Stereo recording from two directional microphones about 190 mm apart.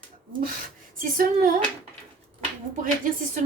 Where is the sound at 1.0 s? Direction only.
45° right (ahead or behind).